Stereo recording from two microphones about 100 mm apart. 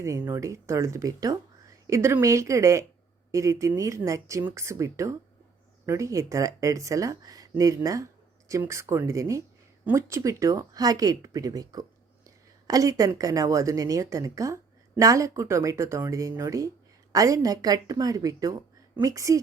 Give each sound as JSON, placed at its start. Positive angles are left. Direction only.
{"t": 0.0, "sound": "speech", "side_deg": -30}